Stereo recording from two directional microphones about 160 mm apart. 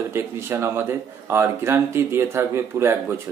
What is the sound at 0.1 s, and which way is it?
Speech, 15° right (ahead or behind).